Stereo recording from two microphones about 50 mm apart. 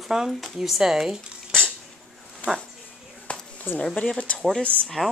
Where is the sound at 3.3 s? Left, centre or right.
Left.